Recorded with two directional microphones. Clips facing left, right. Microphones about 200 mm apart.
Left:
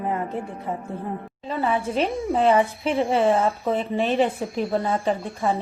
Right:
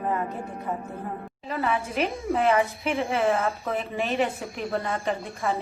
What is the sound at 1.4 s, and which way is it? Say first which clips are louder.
A woman's voice: left 3 dB; 30° left (ahead or behind).